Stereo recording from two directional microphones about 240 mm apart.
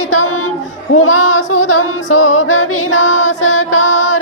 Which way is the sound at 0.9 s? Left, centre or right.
Left.